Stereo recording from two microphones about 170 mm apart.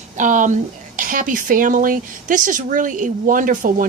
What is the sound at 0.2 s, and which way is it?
Speech, 50° right (ahead or behind).